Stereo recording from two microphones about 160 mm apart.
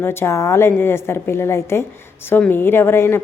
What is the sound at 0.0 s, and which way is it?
A woman's voice, 15° left (ahead or behind).